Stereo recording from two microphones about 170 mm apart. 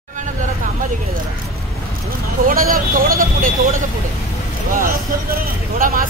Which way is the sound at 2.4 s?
55° right (ahead or behind).